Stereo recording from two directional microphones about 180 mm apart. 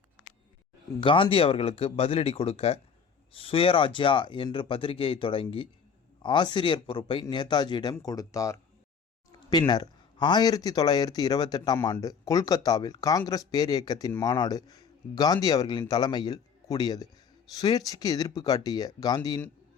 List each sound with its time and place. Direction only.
1.0 s speech: 30° left (ahead or behind)